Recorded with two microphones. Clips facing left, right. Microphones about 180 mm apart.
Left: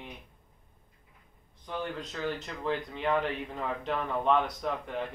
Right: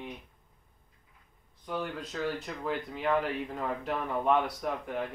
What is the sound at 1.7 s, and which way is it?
Speech, 5° right (ahead or behind).